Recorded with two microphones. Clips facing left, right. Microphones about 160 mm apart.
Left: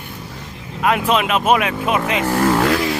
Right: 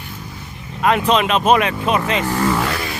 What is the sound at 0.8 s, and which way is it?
Speech, 5° left (ahead or behind).